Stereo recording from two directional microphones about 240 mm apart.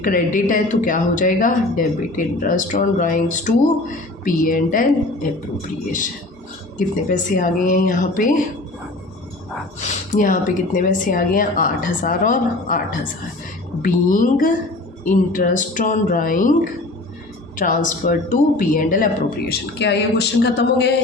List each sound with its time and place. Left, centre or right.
0.0 s speech: left
6.7 s speech: left
9.8 s speech: left
13.8 s speech: left
17.6 s speech: left